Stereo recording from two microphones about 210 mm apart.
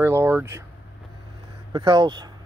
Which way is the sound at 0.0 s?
10° right (ahead or behind).